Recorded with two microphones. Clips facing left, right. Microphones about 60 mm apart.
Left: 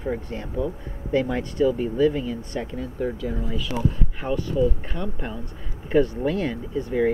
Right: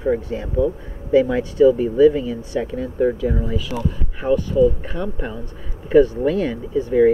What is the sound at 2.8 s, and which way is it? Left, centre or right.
Speech, right.